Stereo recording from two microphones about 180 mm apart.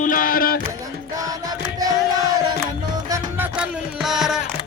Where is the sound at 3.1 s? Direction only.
10° right (ahead or behind).